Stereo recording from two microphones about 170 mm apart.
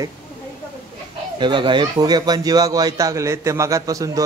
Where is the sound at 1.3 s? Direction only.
30° right (ahead or behind).